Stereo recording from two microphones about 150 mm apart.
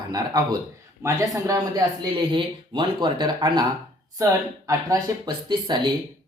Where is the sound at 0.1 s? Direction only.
25° right (ahead or behind).